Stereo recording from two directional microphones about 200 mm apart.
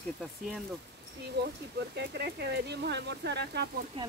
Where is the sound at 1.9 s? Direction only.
55° right (ahead or behind).